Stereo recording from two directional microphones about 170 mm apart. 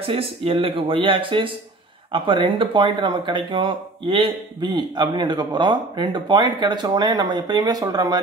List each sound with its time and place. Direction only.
0.0 s speech: 35° right (ahead or behind)